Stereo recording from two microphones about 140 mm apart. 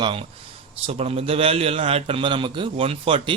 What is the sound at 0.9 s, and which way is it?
A man's voice, 45° right (ahead or behind).